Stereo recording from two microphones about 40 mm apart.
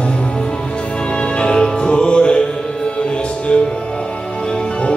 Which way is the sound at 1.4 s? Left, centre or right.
Left.